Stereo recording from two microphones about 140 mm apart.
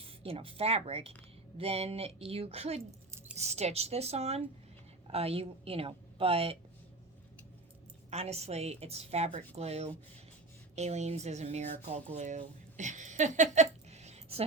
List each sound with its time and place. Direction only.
0.0 s a woman's voice: 45° right (ahead or behind)
8.1 s a woman's voice: 50° right (ahead or behind)